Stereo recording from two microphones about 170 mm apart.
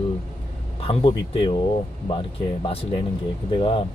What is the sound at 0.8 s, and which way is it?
Speech, 30° left (ahead or behind).